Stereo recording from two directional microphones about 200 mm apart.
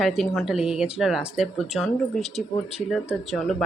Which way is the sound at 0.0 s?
Centre (ahead or behind).